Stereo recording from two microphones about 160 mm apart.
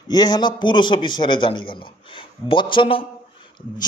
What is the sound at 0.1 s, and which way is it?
A man's voice, 25° left (ahead or behind).